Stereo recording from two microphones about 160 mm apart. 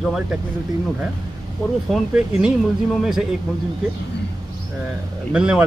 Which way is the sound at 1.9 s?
5° right (ahead or behind).